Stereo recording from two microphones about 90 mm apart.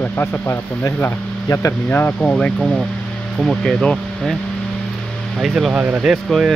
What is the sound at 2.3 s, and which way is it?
Speech, 5° left (ahead or behind).